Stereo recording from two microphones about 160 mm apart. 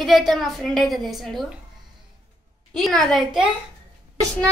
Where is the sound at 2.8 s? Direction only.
Centre (ahead or behind).